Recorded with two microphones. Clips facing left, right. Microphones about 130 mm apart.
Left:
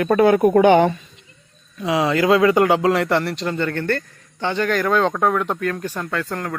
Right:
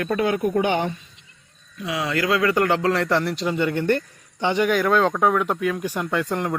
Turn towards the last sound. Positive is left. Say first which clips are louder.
# right 2 dB
turn(degrees=-15)  # may be behind; listen again after turning